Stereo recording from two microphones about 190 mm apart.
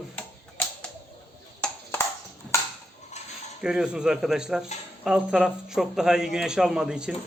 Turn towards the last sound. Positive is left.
turn(degrees=-5)  # may be behind; listen again after turning